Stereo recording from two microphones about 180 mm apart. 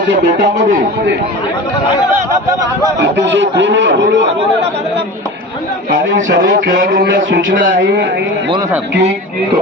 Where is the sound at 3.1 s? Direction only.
90° right.